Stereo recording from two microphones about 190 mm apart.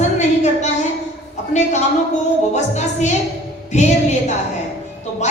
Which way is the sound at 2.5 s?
35° left (ahead or behind).